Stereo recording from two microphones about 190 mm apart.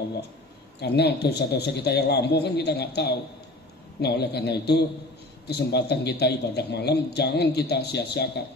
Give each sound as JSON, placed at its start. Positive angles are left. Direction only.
{"t": 0.7, "sound": "speech", "side_deg": 60}